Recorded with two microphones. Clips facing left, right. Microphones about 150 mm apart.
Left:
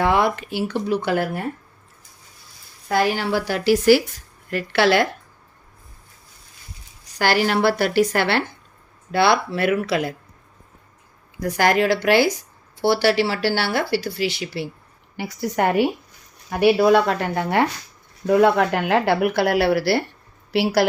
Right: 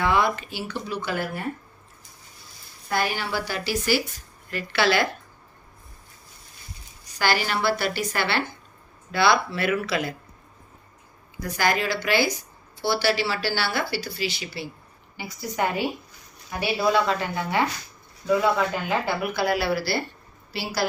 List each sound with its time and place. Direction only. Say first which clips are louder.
0.0 s speech: left 4 dB; 65° left (ahead or behind)
2.9 s speech: left 6 dB; 90° left
4.5 s speech: left 5 dB; 65° left (ahead or behind)
7.2 s speech: left 6 dB; 75° left (ahead or behind); by 10.2 s 60° left (ahead or behind)
11.3 s speech: left 6 dB; 75° left (ahead or behind)